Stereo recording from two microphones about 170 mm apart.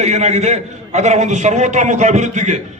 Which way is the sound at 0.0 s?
40° right (ahead or behind).